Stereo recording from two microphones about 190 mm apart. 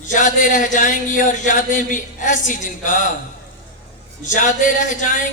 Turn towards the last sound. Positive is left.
turn(degrees=40)  # may be behind; listen again after turning